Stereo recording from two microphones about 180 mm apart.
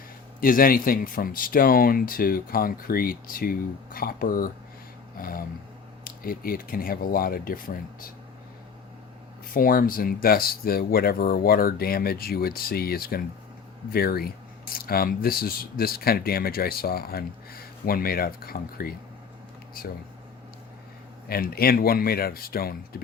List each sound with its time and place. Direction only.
0.3 s speech: 50° left (ahead or behind)
5.1 s a sound: 55° left (ahead or behind)
6.1 s speech: 55° left (ahead or behind)
9.5 s speech: 50° left (ahead or behind)
21.2 s speech: 55° left (ahead or behind)